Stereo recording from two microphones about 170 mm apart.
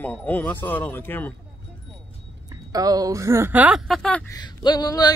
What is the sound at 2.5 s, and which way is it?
Speech, 20° right (ahead or behind).